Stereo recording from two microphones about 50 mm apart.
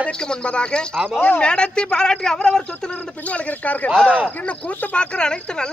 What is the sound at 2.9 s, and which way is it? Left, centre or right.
Speech, left.